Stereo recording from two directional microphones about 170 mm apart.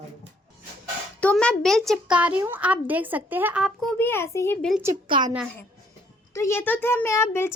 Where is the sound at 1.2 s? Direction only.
5° left (ahead or behind).